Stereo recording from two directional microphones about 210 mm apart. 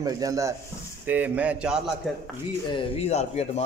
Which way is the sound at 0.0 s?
15° right (ahead or behind).